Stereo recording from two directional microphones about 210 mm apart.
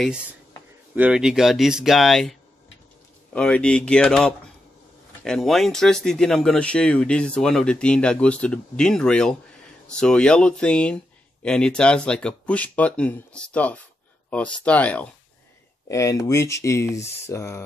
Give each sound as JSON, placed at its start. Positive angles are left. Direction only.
{"t": 0.9, "sound": "speech", "side_deg": -5}
{"t": 3.3, "sound": "speech", "side_deg": 5}